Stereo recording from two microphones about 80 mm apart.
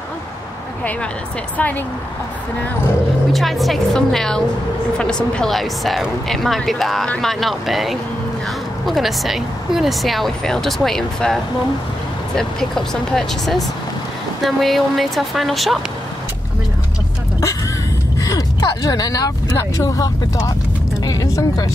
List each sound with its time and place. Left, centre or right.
1.6 s speech: centre
3.3 s speech: centre
18.6 s speech: left